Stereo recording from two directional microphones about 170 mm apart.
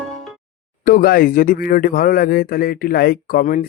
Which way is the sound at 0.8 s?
60° left (ahead or behind).